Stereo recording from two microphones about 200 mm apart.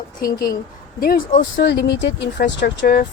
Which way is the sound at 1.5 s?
55° left (ahead or behind).